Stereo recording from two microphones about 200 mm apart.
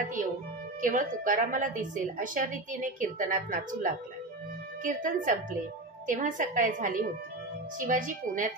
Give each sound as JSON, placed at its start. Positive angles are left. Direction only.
{"t": 0.2, "sound": "a woman's voice", "side_deg": -40}